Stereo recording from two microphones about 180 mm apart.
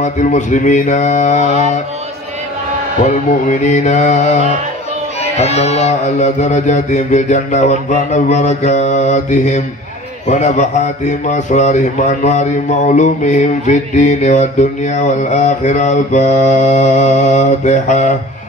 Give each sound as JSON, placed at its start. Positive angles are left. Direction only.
{"t": 0.0, "sound": "mantra", "side_deg": 45}
{"t": 3.0, "sound": "mantra", "side_deg": 45}
{"t": 5.2, "sound": "speech", "side_deg": 35}